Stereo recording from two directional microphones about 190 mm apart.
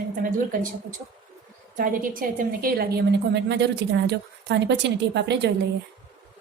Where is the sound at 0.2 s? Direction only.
45° right (ahead or behind); by 5.5 s 65° right (ahead or behind).